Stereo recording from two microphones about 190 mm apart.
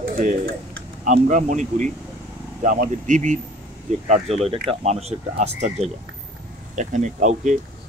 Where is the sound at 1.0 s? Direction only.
40° right (ahead or behind).